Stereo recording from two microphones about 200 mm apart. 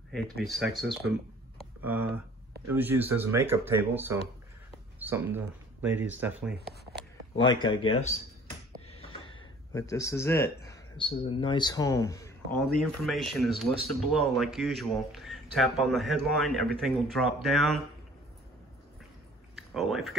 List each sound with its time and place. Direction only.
0.1 s speech: centre (ahead or behind)
7.6 s speech: 25° left (ahead or behind)
8.9 s a sound: 25° left (ahead or behind)
11.0 s speech: 25° left (ahead or behind)
12.8 s speech: centre (ahead or behind)
19.5 s speech: centre (ahead or behind)